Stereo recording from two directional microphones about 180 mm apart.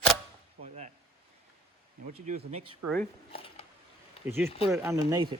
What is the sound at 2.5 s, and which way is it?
Speech, 35° right (ahead or behind).